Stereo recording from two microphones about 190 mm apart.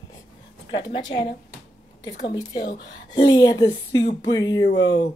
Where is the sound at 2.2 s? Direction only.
25° left (ahead or behind).